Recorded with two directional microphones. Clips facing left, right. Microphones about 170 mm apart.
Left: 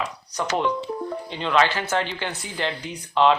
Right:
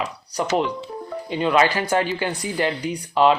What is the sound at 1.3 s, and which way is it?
Speech, 10° right (ahead or behind).